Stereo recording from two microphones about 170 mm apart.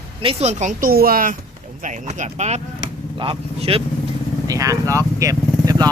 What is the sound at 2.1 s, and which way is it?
Speech, 45° right (ahead or behind).